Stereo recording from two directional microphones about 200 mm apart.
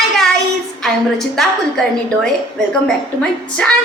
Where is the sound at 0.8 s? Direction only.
Centre (ahead or behind).